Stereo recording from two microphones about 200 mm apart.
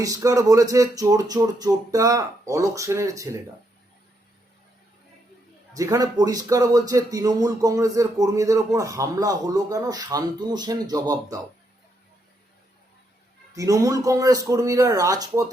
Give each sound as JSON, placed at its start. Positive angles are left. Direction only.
{"t": 0.0, "sound": "speech", "side_deg": -15}
{"t": 5.7, "sound": "speech", "side_deg": -15}
{"t": 13.6, "sound": "speech", "side_deg": -15}